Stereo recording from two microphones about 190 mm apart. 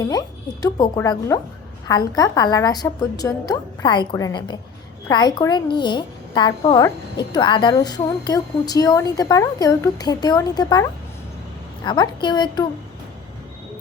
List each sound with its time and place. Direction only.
0.0 s a woman's voice: 20° left (ahead or behind)